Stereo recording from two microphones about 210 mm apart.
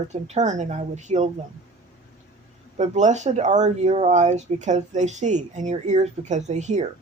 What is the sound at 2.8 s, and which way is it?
Speech, 35° right (ahead or behind).